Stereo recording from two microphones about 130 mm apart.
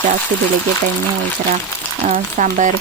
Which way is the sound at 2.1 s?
80° right.